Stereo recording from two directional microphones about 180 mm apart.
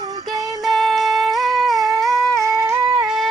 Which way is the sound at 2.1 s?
15° right (ahead or behind).